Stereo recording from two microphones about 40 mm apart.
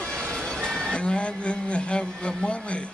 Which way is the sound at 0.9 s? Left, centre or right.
Left.